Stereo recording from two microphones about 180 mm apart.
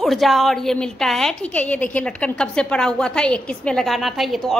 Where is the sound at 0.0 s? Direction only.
Centre (ahead or behind).